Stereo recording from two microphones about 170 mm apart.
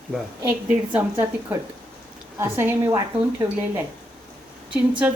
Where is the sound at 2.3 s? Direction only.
15° right (ahead or behind).